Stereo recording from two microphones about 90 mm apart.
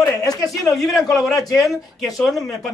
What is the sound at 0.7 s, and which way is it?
Speech, centre (ahead or behind).